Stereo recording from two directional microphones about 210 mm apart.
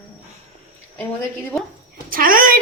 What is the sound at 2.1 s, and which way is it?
Speech, 40° right (ahead or behind).